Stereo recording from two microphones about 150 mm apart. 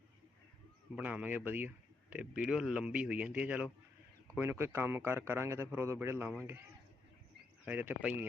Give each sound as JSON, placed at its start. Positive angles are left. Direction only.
{"t": 0.9, "sound": "speech", "side_deg": -10}
{"t": 7.6, "sound": "speech", "side_deg": -10}